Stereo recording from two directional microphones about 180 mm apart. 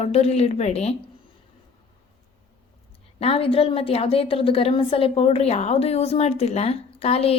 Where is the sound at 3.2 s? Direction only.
35° left (ahead or behind).